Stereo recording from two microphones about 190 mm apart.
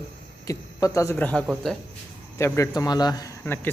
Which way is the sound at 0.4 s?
15° left (ahead or behind).